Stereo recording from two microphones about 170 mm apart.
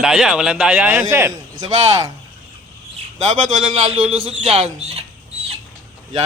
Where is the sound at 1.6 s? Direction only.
25° right (ahead or behind).